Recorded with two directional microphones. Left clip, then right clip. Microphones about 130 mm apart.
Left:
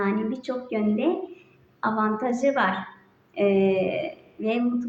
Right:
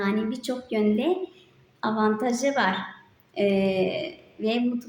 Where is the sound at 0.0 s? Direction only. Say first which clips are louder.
Left 1 dB; 20° right (ahead or behind).